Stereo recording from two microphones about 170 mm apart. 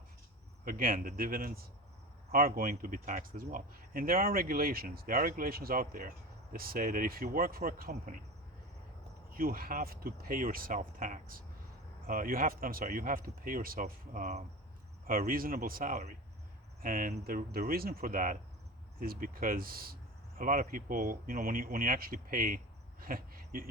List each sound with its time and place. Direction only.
0.6 s speech: 55° right (ahead or behind)
9.3 s speech: 60° right (ahead or behind)
15.0 s speech: 55° right (ahead or behind)